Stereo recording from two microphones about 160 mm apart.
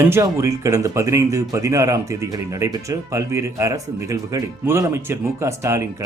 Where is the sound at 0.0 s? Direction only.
15° right (ahead or behind).